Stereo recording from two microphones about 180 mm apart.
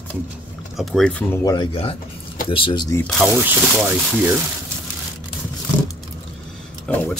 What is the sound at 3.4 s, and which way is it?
Speech, 10° right (ahead or behind).